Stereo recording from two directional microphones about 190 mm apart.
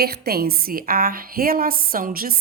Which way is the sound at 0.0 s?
55° right (ahead or behind).